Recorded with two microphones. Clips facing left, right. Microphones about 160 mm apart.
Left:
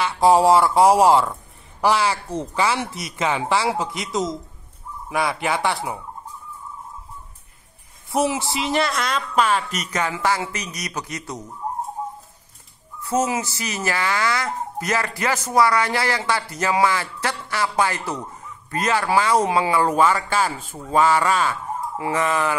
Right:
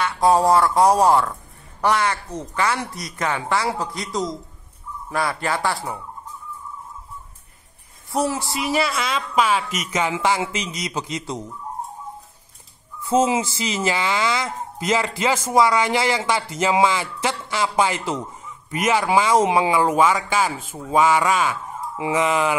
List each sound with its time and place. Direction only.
0.0 s speech: 25° left (ahead or behind)
0.6 s a woman's voice: 5° left (ahead or behind)
1.1 s a sound: 5° left (ahead or behind)
2.2 s speech: 30° left (ahead or behind)
5.1 s a woman's voice: centre (ahead or behind)
8.1 s speech: 20° left (ahead or behind)
8.7 s a woman's voice: 5° right (ahead or behind)
10.1 s speech: 20° right (ahead or behind)
13.1 s speech: 25° right (ahead or behind)
19.8 s speech: 5° right (ahead or behind)